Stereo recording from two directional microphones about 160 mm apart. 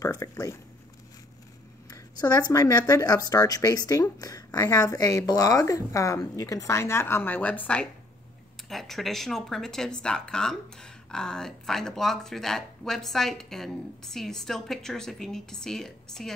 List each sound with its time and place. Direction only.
0.0 s speech: 20° left (ahead or behind)
1.9 s speech: 25° left (ahead or behind); by 16.3 s 5° left (ahead or behind)